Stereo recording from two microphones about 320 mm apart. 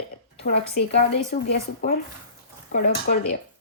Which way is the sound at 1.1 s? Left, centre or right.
Left.